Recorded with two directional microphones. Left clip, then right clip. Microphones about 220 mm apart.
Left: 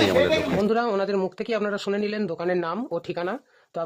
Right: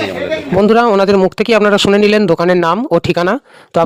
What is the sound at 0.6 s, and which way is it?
Speech, 40° right (ahead or behind).